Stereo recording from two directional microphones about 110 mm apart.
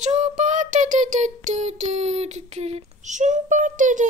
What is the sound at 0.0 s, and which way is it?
Child singing, 90° right.